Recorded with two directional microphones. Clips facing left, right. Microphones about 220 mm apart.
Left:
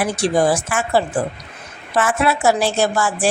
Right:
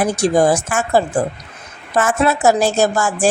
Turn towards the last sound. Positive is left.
turn(degrees=-45)  # may be behind; listen again after turning